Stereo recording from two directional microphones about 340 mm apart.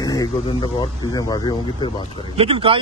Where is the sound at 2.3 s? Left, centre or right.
Centre.